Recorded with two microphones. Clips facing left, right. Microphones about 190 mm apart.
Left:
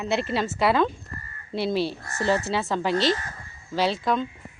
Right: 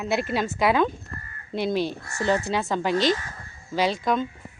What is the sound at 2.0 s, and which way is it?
Speech, 35° left (ahead or behind).